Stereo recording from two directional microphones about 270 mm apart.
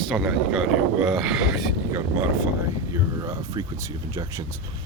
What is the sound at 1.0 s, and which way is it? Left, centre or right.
Speech, centre.